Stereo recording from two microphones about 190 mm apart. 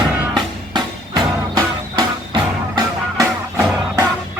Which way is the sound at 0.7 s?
20° right (ahead or behind).